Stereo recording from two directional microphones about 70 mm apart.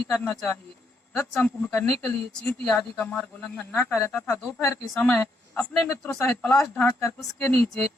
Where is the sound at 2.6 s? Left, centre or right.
Centre.